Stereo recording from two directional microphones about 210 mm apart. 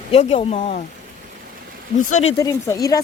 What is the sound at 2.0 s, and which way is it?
Speech, 35° left (ahead or behind).